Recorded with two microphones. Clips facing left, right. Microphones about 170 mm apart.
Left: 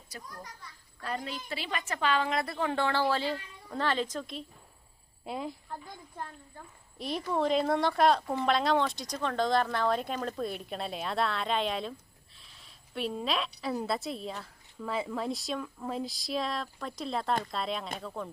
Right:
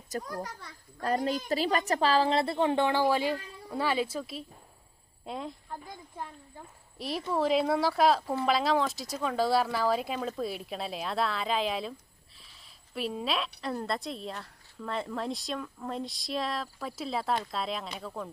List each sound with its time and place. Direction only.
0.3 s a child's voice: 75° right (ahead or behind)
0.9 s a child's voice: 40° right (ahead or behind); by 18.3 s centre (ahead or behind)